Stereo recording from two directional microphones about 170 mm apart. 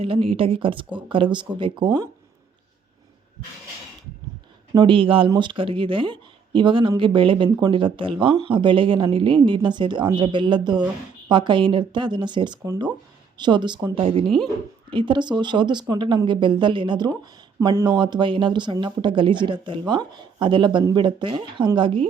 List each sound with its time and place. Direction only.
0.0 s speech: 30° right (ahead or behind)
4.7 s speech: 30° right (ahead or behind)
14.3 s speech: centre (ahead or behind)
14.8 s speech: 30° right (ahead or behind)